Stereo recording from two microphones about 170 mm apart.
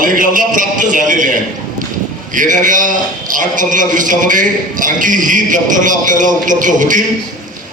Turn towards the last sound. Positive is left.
turn(degrees=-50)  # may be behind; listen again after turning